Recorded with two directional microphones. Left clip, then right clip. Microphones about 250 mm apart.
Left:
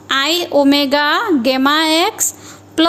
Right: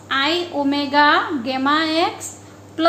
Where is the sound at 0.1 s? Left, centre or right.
Left.